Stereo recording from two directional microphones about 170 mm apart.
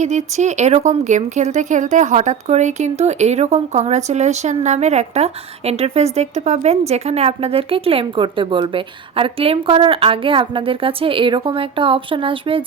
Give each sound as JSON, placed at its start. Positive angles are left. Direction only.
{"t": 0.0, "sound": "speech", "side_deg": -45}